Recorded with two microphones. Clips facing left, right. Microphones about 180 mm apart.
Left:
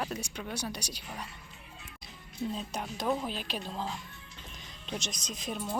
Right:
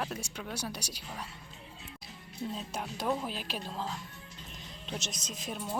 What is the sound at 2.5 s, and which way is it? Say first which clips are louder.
Speech: left 1 dB; centre (ahead or behind).